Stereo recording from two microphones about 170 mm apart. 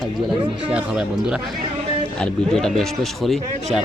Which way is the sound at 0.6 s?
5° right (ahead or behind).